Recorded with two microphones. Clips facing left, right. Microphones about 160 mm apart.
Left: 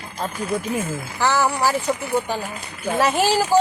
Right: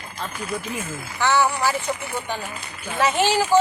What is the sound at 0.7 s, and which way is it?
Speech, 40° left (ahead or behind).